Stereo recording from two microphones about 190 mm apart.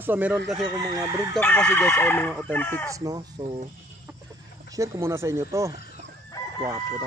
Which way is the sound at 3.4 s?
30° right (ahead or behind).